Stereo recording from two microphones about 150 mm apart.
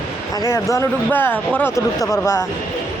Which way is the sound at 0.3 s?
20° left (ahead or behind).